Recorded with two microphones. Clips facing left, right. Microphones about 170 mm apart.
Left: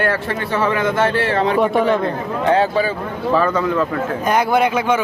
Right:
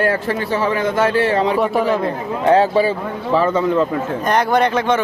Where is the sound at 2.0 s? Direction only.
35° right (ahead or behind).